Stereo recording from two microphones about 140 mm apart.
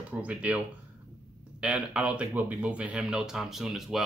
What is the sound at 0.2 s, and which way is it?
Speech, 10° right (ahead or behind).